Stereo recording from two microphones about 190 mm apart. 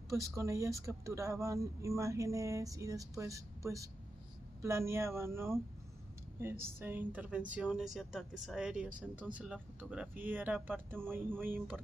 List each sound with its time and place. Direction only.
0.1 s a woman's voice: 15° right (ahead or behind)